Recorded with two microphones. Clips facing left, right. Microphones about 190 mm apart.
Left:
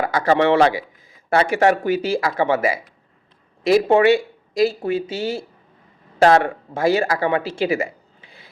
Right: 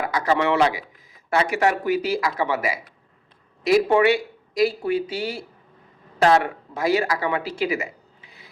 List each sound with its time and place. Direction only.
0.0 s a man's voice: 30° left (ahead or behind)
6.2 s speech: 35° left (ahead or behind)